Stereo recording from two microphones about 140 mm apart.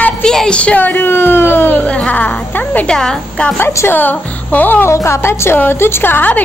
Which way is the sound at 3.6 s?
20° left (ahead or behind).